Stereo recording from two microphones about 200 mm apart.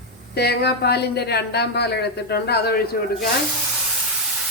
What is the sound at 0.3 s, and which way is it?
Speech, 55° left (ahead or behind).